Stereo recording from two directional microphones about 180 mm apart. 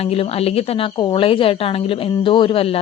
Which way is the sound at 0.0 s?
35° left (ahead or behind).